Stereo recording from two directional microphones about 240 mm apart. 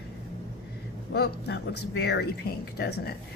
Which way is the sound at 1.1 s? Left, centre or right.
Left.